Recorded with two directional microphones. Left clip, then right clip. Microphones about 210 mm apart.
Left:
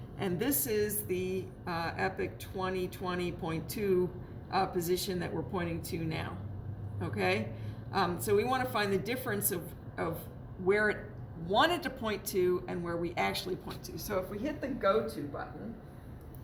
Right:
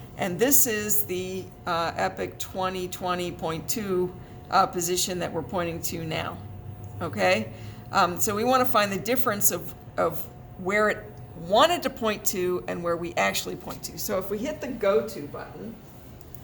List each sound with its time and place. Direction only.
0.2 s a woman's voice: 45° right (ahead or behind)
10.7 s a woman's voice: 50° right (ahead or behind)